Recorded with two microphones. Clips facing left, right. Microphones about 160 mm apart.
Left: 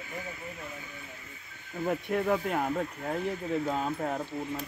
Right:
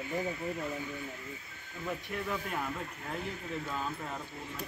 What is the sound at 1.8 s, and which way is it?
Speech, 55° left (ahead or behind).